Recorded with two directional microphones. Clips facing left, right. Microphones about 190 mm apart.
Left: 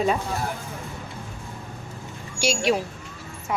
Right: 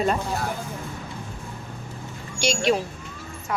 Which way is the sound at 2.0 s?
5° left (ahead or behind).